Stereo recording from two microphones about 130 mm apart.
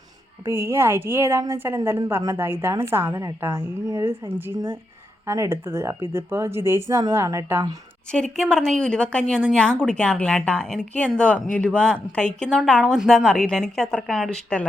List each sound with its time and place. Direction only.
0.4 s a woman's voice: 20° right (ahead or behind)
8.1 s a woman's voice: 5° left (ahead or behind)